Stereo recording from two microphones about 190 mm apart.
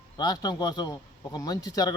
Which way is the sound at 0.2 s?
20° left (ahead or behind).